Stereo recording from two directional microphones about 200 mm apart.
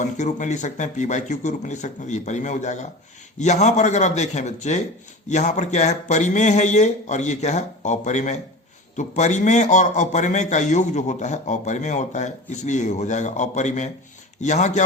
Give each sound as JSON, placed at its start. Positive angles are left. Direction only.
{"t": 0.0, "sound": "a man's voice", "side_deg": 35}